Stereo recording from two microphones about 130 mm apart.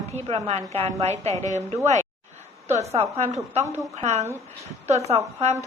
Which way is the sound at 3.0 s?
55° right (ahead or behind).